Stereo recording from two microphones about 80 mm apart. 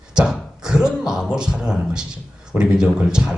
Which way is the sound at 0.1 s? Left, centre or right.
Centre.